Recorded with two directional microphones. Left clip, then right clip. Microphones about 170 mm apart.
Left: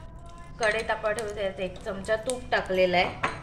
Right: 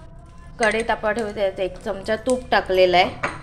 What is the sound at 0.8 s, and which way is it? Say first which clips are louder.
A woman's voice: right 6 dB; 50° right (ahead or behind).